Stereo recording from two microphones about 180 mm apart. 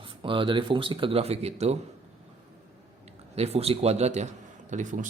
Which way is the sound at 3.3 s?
35° right (ahead or behind).